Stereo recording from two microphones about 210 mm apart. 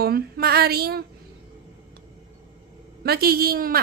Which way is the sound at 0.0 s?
50° right (ahead or behind).